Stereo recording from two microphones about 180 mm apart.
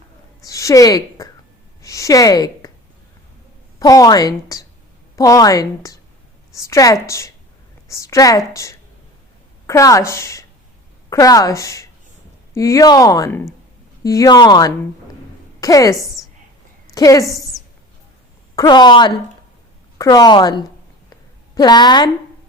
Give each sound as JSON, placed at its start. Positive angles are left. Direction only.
{"t": 0.4, "sound": "a woman's voice", "side_deg": 20}
{"t": 3.8, "sound": "a woman's voice", "side_deg": 20}
{"t": 9.6, "sound": "a woman's voice", "side_deg": 15}
{"t": 18.5, "sound": "a woman's voice", "side_deg": 20}